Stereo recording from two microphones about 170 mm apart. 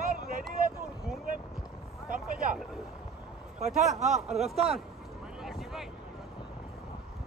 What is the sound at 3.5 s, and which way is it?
A man's voice, 40° right (ahead or behind).